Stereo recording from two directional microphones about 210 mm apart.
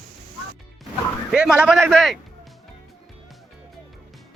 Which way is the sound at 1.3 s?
5° right (ahead or behind).